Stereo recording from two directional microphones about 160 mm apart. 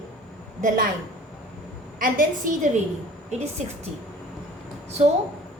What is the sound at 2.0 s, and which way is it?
Speech, 55° right (ahead or behind).